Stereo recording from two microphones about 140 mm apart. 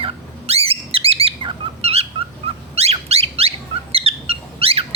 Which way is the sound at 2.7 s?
50° right (ahead or behind).